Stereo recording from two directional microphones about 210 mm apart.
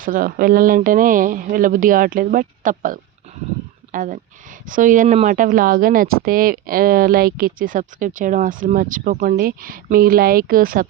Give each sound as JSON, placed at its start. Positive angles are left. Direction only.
{"t": 0.0, "sound": "speech", "side_deg": -40}